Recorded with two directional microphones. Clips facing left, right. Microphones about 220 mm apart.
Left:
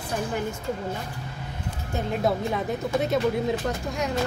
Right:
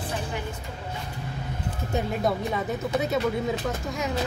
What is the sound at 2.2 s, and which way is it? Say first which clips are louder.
Speech: left 1 dB; centre (ahead or behind).